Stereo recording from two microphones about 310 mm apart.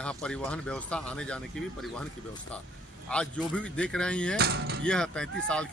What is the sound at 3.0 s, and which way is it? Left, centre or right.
Speech, centre.